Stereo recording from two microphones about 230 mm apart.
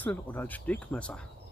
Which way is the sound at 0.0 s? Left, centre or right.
Centre.